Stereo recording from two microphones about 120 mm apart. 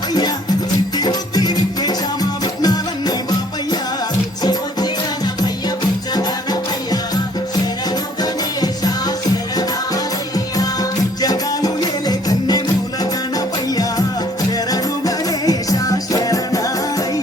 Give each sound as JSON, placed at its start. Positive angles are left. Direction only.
{"t": 0.9, "sound": "music", "side_deg": 35}
{"t": 8.2, "sound": "music", "side_deg": 35}